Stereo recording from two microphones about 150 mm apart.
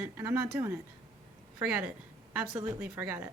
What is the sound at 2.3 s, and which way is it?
A woman's voice, 15° right (ahead or behind).